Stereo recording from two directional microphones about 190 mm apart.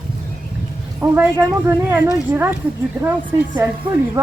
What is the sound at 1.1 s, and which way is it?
Speech, 10° right (ahead or behind).